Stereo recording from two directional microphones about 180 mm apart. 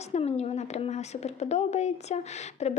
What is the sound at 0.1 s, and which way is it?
A woman's voice, 35° left (ahead or behind).